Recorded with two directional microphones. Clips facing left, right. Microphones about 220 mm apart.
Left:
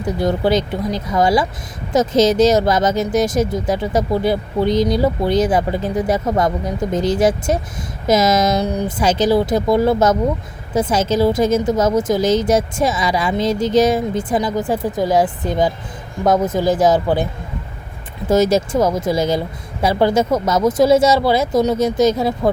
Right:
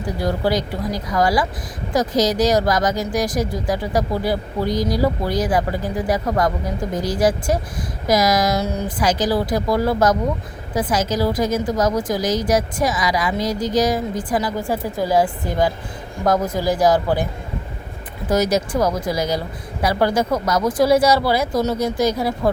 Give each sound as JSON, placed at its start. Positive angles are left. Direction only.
{"t": 0.2, "sound": "speech", "side_deg": 20}
{"t": 18.3, "sound": "speech", "side_deg": 25}